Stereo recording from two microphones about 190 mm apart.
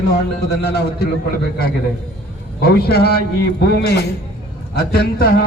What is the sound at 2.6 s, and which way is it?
A man's voice, 55° left (ahead or behind).